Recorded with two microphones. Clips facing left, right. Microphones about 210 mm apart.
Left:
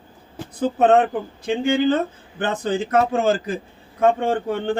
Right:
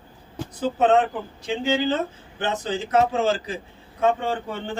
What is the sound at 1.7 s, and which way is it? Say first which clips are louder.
Speech: left 4 dB; 55° left (ahead or behind).